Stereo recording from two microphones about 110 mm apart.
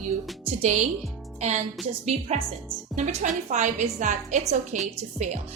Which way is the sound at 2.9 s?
90° right.